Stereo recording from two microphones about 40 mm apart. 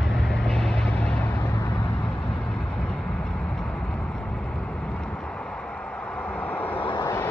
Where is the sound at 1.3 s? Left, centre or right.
Left.